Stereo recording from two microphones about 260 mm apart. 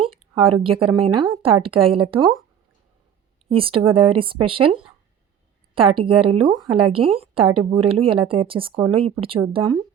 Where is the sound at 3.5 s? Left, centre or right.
Right.